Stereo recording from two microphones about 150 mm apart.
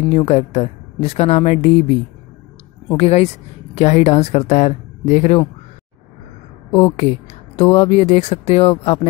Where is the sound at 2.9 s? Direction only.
45° left (ahead or behind).